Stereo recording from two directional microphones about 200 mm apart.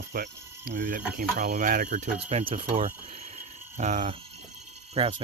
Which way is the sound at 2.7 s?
30° right (ahead or behind).